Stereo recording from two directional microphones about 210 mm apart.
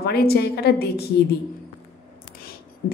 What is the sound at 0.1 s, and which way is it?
Speech, 50° left (ahead or behind).